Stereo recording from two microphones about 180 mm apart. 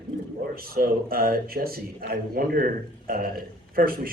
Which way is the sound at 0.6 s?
55° right (ahead or behind).